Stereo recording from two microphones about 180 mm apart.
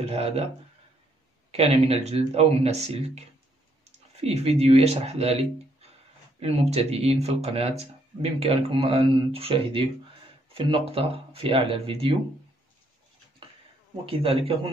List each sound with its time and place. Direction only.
0.0 s speech: 35° right (ahead or behind)
1.5 s speech: 35° right (ahead or behind)
14.0 s speech: 30° right (ahead or behind)